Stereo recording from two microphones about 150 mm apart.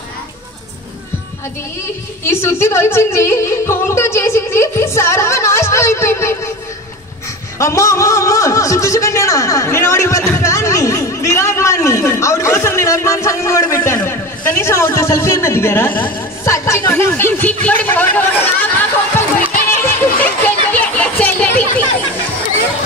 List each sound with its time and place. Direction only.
2.2 s speech: 15° left (ahead or behind)
7.5 s a man's voice: 20° left (ahead or behind)
10.3 s chatter: 20° left (ahead or behind)
17.6 s speech: 10° left (ahead or behind)
20.2 s a sound: 10° left (ahead or behind)